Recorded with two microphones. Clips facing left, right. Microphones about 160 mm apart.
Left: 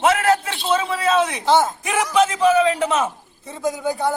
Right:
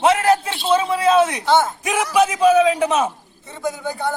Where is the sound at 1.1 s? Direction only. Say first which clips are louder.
Right 2 dB; 10° right (ahead or behind).